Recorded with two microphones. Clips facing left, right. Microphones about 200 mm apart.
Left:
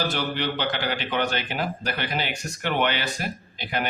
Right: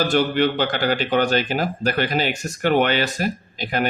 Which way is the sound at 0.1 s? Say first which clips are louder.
Right 9 dB; 45° right (ahead or behind).